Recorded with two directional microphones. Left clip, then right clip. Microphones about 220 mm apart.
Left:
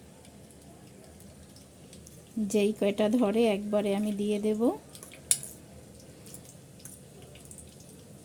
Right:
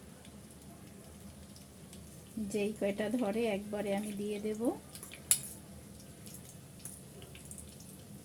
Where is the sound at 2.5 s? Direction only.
45° left (ahead or behind).